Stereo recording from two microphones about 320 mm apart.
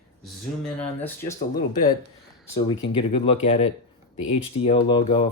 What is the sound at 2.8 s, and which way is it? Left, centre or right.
Speech, centre.